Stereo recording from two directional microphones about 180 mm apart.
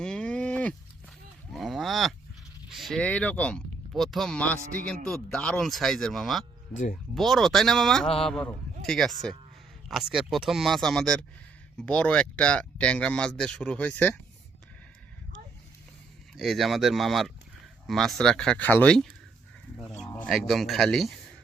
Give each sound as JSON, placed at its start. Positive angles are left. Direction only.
{"t": 0.0, "sound": "cattle", "side_deg": 5}
{"t": 2.6, "sound": "speech", "side_deg": 0}
{"t": 4.6, "sound": "a man's voice", "side_deg": -50}
{"t": 5.0, "sound": "speech", "side_deg": 5}
{"t": 16.3, "sound": "speech", "side_deg": 0}
{"t": 19.7, "sound": "sheep", "side_deg": 5}
{"t": 20.2, "sound": "speech", "side_deg": 0}